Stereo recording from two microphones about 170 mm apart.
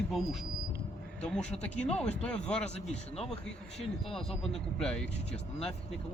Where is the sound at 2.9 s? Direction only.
40° left (ahead or behind).